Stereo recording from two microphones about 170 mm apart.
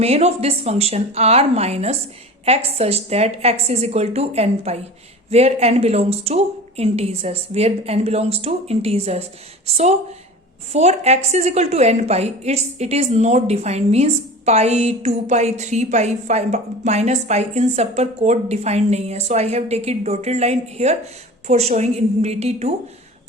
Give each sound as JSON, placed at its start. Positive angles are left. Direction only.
{"t": 0.0, "sound": "a woman's voice", "side_deg": -40}